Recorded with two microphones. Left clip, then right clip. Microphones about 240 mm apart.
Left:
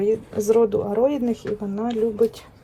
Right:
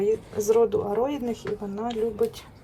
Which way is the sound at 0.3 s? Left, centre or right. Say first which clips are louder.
Left 3 dB; centre.